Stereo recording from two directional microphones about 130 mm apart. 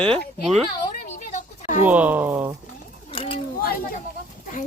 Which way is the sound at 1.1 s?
70° left (ahead or behind).